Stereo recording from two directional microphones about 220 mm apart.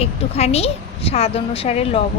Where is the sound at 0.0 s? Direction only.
30° left (ahead or behind).